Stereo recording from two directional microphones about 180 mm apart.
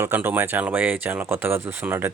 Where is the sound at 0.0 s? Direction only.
10° right (ahead or behind).